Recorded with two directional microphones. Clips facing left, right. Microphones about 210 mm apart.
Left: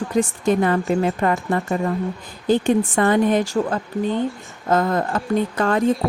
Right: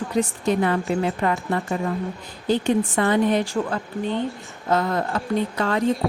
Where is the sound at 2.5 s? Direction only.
50° left (ahead or behind).